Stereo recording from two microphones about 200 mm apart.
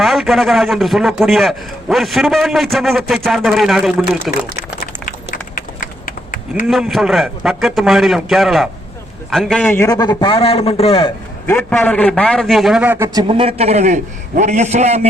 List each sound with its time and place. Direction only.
0.0 s a man's voice: centre (ahead or behind)
5.0 s a sound: 40° left (ahead or behind)
6.7 s a man's voice: centre (ahead or behind); by 11.1 s 30° left (ahead or behind)
11.4 s a man's voice: 10° left (ahead or behind); by 13.2 s 10° right (ahead or behind)
13.2 s a man's voice: 25° right (ahead or behind)